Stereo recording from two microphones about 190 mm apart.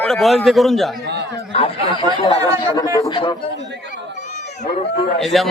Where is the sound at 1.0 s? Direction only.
65° right (ahead or behind).